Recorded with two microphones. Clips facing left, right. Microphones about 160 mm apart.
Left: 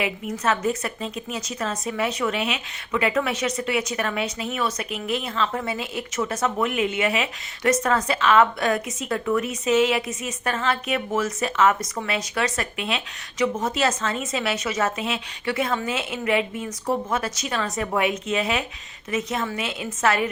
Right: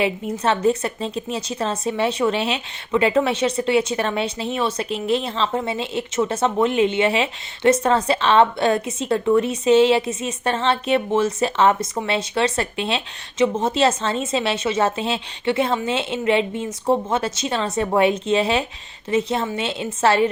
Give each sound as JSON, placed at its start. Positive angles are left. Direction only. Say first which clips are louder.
{"t": 0.0, "sound": "a woman's voice", "louder": "right 4 dB", "side_deg": -30}